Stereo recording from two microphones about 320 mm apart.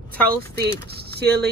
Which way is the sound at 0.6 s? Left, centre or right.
Right.